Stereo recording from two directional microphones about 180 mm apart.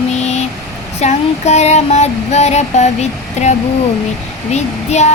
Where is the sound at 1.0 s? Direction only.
40° left (ahead or behind).